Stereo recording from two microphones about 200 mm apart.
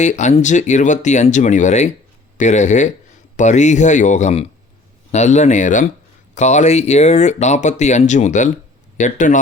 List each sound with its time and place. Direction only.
0.0 s speech: 35° left (ahead or behind)